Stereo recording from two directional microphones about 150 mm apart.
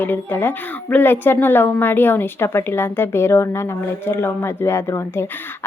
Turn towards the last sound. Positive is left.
turn(degrees=15)  # may be behind; listen again after turning